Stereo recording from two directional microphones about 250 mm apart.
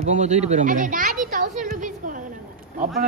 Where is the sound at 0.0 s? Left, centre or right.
Right.